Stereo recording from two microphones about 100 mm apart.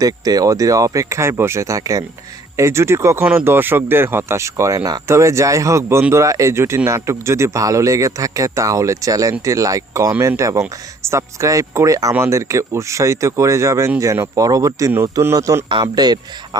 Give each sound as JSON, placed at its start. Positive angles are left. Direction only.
{"t": 0.0, "sound": "speech", "side_deg": -40}
{"t": 15.7, "sound": "speech", "side_deg": -45}